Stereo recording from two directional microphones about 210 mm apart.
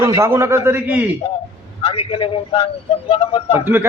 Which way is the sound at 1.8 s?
25° left (ahead or behind).